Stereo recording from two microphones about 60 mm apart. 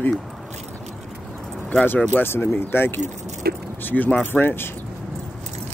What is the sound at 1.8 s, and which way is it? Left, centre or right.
Speech, left.